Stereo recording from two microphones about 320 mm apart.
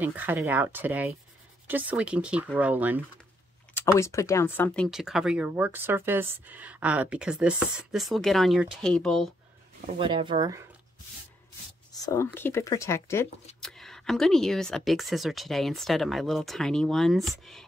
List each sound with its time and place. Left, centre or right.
0.0 s speech: centre
3.7 s speech: centre
9.8 s speech: centre
12.1 s speech: centre